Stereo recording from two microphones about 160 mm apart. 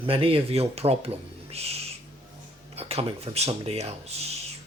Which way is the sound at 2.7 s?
40° right (ahead or behind).